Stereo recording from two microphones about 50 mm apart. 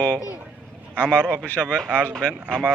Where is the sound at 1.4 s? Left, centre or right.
Left.